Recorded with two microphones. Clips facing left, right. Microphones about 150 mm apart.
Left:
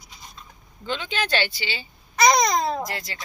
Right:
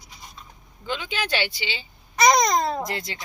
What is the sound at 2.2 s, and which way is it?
Speech, centre (ahead or behind).